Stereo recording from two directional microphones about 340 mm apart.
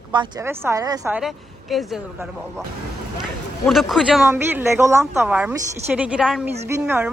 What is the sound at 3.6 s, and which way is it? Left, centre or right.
Speech, centre.